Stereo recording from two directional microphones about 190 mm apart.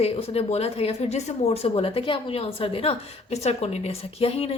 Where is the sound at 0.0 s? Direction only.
30° left (ahead or behind).